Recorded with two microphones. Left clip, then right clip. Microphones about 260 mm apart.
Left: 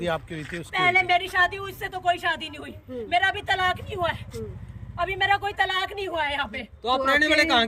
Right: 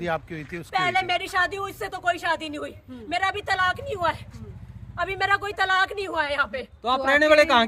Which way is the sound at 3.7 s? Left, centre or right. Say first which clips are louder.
Right 1 dB; centre.